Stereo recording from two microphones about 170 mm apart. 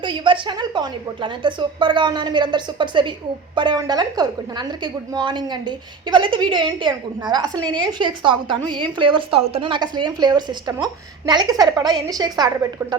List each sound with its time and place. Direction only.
0.0 s a woman's voice: 30° right (ahead or behind)